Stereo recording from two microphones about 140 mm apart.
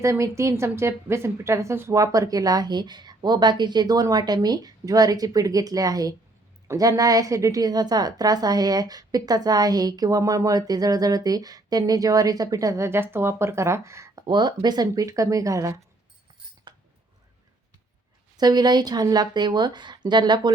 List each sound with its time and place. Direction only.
0.0 s a woman's voice: 20° right (ahead or behind)
14.3 s a woman's voice: 30° right (ahead or behind)
18.3 s speech: 30° right (ahead or behind)